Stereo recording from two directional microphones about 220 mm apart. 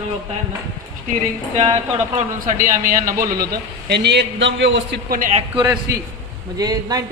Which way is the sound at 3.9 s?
50° right (ahead or behind).